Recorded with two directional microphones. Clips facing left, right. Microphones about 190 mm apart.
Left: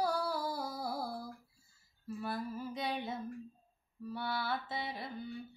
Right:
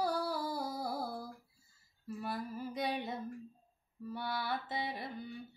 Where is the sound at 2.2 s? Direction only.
15° right (ahead or behind).